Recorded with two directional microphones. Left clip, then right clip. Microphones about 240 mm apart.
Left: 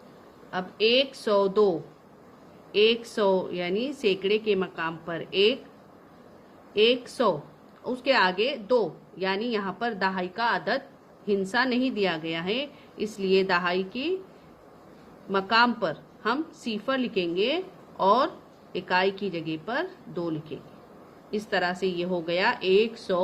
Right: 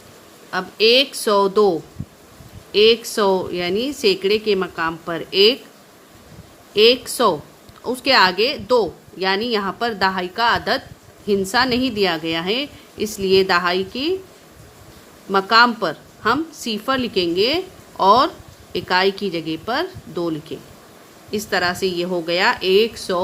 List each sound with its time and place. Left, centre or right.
0.5 s a woman's voice: centre
2.7 s a woman's voice: centre
6.7 s a woman's voice: centre
15.3 s a woman's voice: centre